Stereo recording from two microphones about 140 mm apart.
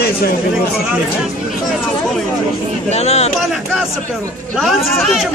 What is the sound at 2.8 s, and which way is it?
Speech, 50° left (ahead or behind).